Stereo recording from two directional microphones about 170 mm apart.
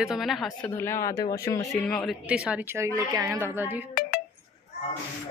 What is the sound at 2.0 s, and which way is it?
A woman's voice, 5° right (ahead or behind).